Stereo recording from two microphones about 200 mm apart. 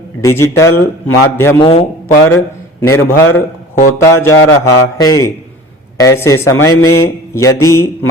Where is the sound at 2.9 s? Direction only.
10° left (ahead or behind).